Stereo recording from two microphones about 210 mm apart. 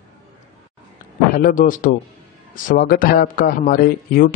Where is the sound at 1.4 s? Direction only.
40° left (ahead or behind).